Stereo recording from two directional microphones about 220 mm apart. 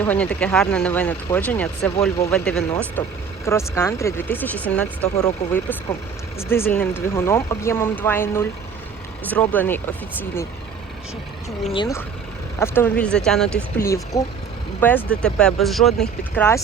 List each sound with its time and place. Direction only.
0.0 s speech: 5° left (ahead or behind)
11.6 s speech: 25° left (ahead or behind)
12.5 s speech: 10° left (ahead or behind)
13.8 s speech: 15° left (ahead or behind)